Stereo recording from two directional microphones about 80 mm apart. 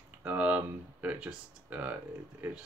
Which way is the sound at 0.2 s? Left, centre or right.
Right.